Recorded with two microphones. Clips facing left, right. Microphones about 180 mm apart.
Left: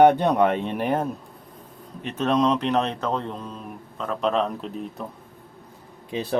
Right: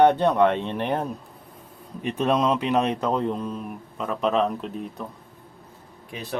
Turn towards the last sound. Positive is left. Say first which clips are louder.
# left 8 dB
turn(degrees=25)  # may be behind; listen again after turning